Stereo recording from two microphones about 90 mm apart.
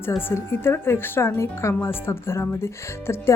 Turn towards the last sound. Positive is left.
turn(degrees=30)  # may be behind; listen again after turning